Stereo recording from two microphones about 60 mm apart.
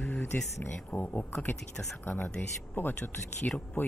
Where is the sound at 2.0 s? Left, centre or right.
Left.